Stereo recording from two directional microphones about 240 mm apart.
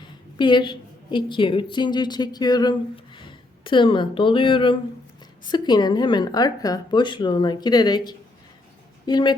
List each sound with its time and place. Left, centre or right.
0.3 s a woman's voice: centre